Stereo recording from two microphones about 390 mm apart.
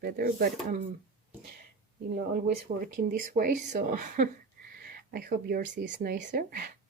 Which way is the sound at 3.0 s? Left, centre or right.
Right.